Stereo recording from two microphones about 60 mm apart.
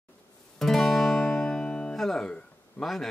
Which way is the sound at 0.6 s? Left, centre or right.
Centre.